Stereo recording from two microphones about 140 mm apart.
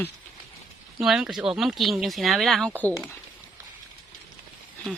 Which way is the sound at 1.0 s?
5° right (ahead or behind).